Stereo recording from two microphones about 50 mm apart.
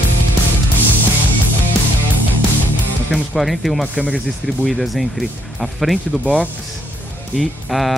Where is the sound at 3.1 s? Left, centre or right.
Centre.